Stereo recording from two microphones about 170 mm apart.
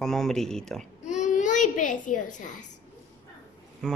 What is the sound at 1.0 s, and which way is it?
Babbling, 45° left (ahead or behind).